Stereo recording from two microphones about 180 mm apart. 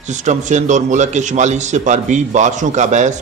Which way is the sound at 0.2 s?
40° right (ahead or behind).